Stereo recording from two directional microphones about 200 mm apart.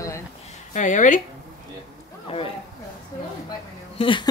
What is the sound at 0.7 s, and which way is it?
Speech, 40° left (ahead or behind).